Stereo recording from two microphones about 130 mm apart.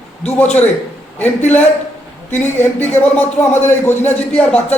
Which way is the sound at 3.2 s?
15° left (ahead or behind).